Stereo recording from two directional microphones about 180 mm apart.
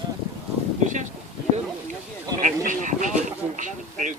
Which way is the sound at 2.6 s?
45° right (ahead or behind).